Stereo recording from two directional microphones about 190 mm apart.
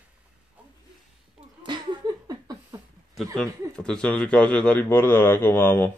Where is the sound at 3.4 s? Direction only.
5° left (ahead or behind).